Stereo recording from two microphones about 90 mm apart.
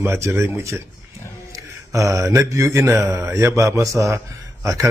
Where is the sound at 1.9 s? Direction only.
35° right (ahead or behind).